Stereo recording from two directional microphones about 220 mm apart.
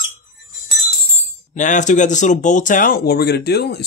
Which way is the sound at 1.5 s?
35° left (ahead or behind).